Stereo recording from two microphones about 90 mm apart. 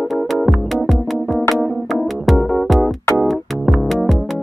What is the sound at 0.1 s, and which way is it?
Music, centre (ahead or behind).